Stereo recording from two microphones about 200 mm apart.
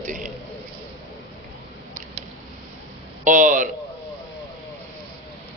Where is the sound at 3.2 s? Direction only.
40° right (ahead or behind).